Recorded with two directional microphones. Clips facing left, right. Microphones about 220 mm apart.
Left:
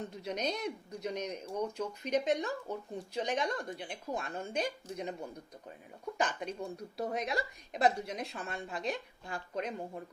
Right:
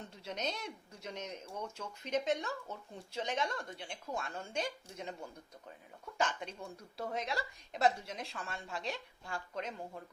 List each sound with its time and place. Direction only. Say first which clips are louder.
0.3 s a woman's voice: left 5 dB; 15° left (ahead or behind)